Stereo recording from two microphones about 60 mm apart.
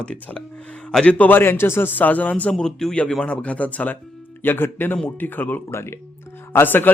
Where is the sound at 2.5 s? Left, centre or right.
Centre.